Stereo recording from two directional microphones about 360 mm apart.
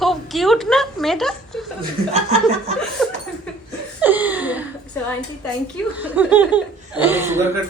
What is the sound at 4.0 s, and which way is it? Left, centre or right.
Laughter, centre.